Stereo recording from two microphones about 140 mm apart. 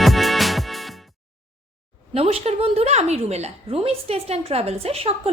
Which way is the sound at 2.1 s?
45° right (ahead or behind).